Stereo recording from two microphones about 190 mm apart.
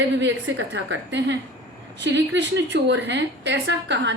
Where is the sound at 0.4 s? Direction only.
70° right (ahead or behind).